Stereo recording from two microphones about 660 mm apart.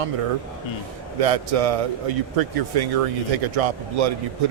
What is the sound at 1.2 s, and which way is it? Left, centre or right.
A man's voice, right.